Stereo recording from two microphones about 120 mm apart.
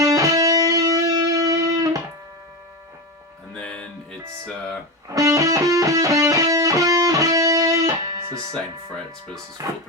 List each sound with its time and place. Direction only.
0.0 s music: 30° right (ahead or behind)
3.5 s music: 10° left (ahead or behind)
5.0 s music: 30° right (ahead or behind)
9.6 s music: 30° right (ahead or behind)